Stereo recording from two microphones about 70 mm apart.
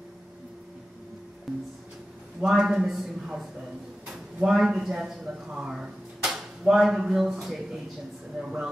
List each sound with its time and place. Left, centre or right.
2.4 s a man's voice: centre